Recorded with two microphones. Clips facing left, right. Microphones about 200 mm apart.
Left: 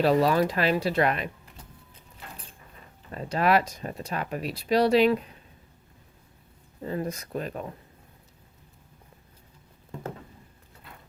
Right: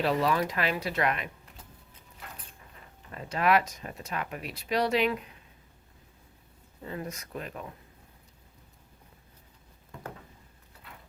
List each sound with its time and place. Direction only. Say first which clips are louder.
0.0 s speech: left 5 dB; 35° left (ahead or behind)
3.1 s speech: left 2 dB; 35° left (ahead or behind)
6.8 s speech: left 6 dB; 35° left (ahead or behind)